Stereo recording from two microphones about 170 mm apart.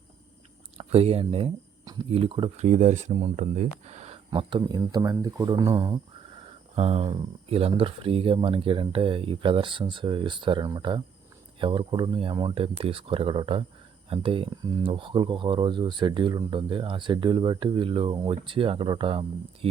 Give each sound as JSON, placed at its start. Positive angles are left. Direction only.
{"t": 0.8, "sound": "speech", "side_deg": -35}
{"t": 4.3, "sound": "speech", "side_deg": -30}
{"t": 6.7, "sound": "speech", "side_deg": -35}